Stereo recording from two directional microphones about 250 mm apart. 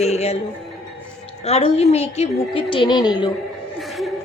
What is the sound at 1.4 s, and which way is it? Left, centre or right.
A woman's voice, left.